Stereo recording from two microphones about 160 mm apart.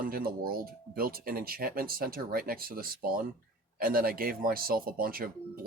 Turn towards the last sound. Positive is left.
turn(degrees=-65)  # may be behind; listen again after turning